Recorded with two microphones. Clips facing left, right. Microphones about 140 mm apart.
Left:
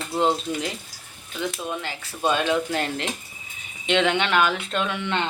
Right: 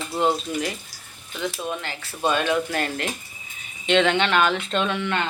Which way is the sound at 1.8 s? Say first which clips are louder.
Left 1 dB; 15° left (ahead or behind).